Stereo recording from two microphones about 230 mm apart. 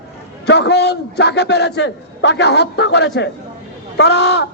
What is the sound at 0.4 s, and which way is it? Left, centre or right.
A man's voice, left.